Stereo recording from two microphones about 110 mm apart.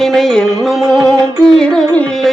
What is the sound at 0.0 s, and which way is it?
Music, 5° left (ahead or behind).